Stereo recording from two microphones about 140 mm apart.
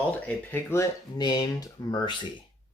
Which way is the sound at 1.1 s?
30° left (ahead or behind).